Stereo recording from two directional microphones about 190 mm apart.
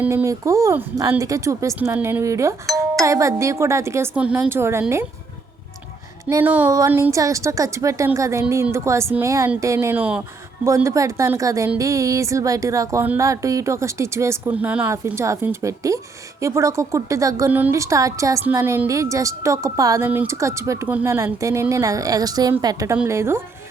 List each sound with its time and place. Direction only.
0.0 s a woman's voice: 15° right (ahead or behind)
6.2 s a woman's voice: 10° right (ahead or behind)